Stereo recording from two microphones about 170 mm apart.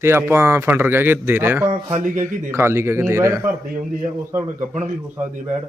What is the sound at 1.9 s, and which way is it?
Speech, 50° right (ahead or behind).